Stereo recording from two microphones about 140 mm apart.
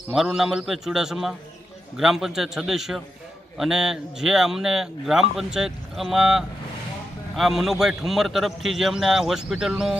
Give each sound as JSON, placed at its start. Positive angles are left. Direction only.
{"t": 0.1, "sound": "speech", "side_deg": -5}